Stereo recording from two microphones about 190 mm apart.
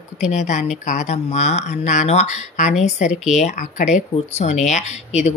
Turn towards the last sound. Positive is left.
turn(degrees=35)  # may be behind; listen again after turning